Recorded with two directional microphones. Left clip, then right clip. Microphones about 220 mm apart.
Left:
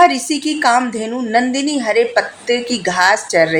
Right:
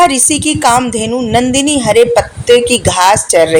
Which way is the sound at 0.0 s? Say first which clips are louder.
Right 3 dB; 30° right (ahead or behind).